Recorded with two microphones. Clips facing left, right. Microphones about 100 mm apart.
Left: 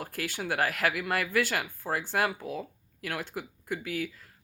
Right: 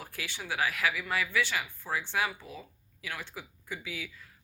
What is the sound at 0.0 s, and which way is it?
Speech, 50° left (ahead or behind).